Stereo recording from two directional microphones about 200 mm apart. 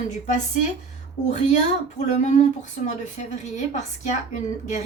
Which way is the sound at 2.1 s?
35° left (ahead or behind).